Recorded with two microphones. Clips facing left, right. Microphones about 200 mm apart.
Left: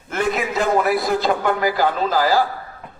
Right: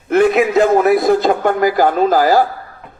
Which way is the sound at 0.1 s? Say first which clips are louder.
Right 10 dB; 55° right (ahead or behind).